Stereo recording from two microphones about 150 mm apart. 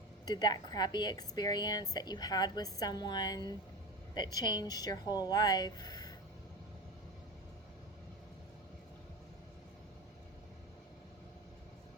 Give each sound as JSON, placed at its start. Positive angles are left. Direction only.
{"t": 0.3, "sound": "a woman's voice", "side_deg": 25}